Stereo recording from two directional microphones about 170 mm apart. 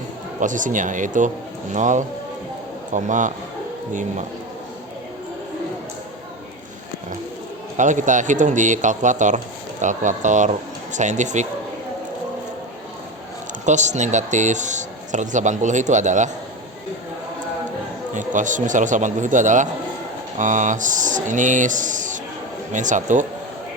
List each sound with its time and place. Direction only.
0.3 s speech: 50° right (ahead or behind)
7.8 s speech: 45° right (ahead or behind)
13.7 s speech: 45° right (ahead or behind)
18.1 s speech: 45° right (ahead or behind)